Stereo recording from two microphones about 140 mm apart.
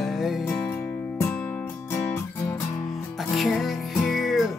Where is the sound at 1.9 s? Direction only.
15° left (ahead or behind).